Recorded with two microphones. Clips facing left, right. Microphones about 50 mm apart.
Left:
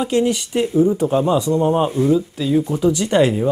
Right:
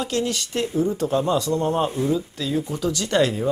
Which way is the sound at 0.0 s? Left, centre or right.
Centre.